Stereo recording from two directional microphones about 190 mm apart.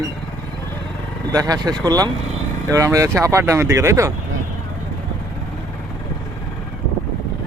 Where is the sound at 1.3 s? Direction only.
20° right (ahead or behind).